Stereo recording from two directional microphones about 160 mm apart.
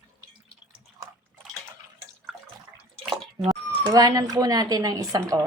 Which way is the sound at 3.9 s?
25° right (ahead or behind).